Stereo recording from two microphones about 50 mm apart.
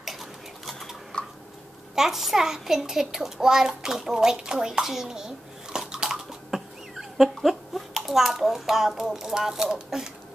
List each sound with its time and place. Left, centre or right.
0.0 s bird: centre
1.1 s a sound: centre
2.0 s a child's voice: centre